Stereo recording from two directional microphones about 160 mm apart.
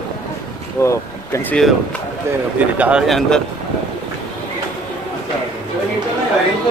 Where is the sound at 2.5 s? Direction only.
10° right (ahead or behind).